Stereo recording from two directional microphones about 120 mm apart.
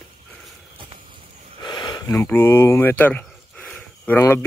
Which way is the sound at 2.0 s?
20° left (ahead or behind).